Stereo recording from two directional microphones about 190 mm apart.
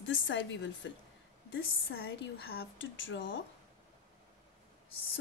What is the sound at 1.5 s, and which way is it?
A woman's voice, 55° left (ahead or behind).